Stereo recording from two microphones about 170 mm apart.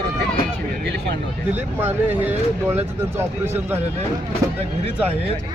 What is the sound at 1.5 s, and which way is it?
Speech, 10° right (ahead or behind).